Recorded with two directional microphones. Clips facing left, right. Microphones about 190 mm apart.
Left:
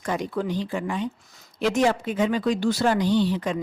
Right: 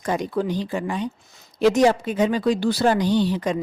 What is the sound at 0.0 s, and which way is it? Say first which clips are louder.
Speech: right 3 dB; 40° right (ahead or behind).